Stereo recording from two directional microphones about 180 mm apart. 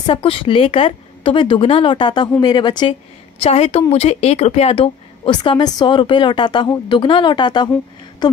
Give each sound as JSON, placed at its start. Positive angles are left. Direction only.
{"t": 0.0, "sound": "a woman's voice", "side_deg": 30}